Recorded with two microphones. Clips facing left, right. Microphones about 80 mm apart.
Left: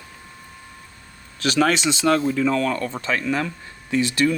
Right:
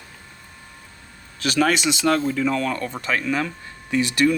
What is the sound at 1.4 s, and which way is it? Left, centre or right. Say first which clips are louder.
Speech: left 1 dB; left.